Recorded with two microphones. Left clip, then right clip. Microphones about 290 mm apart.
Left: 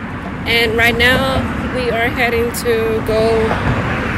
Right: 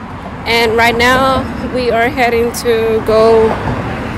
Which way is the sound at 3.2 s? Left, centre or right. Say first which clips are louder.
Right 6 dB; right.